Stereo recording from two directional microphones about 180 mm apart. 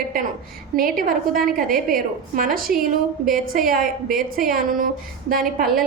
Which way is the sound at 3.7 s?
50° right (ahead or behind).